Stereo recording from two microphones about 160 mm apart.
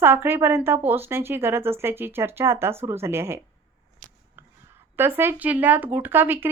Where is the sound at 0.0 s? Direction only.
15° right (ahead or behind).